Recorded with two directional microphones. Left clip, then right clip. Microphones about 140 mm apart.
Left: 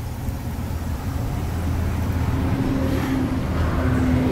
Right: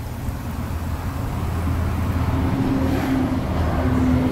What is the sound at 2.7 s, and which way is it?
Vehicle, 65° right (ahead or behind).